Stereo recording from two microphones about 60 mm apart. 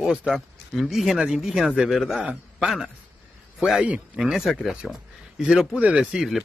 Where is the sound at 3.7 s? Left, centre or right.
Centre.